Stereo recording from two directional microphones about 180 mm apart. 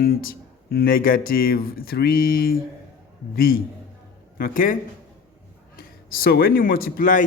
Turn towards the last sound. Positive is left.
turn(degrees=50)  # may be behind; listen again after turning